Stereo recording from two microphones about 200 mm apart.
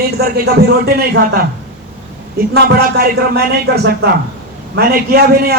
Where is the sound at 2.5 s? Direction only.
50° right (ahead or behind).